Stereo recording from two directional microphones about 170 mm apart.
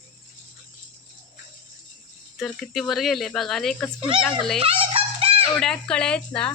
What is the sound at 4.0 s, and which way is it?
Speech, 30° right (ahead or behind).